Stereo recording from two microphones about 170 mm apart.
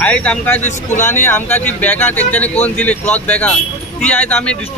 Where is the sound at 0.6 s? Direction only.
45° left (ahead or behind).